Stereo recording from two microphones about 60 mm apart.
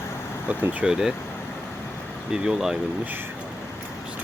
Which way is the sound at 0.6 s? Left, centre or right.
Right.